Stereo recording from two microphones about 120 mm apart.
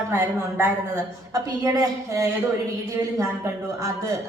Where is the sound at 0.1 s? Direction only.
20° right (ahead or behind).